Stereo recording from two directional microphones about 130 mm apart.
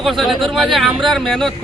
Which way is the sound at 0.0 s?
Centre (ahead or behind).